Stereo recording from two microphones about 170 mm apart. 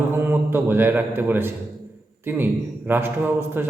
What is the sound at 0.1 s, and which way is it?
A man's voice, 10° right (ahead or behind).